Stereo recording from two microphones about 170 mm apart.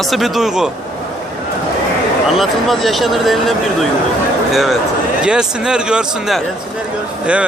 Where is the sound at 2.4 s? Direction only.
Centre (ahead or behind).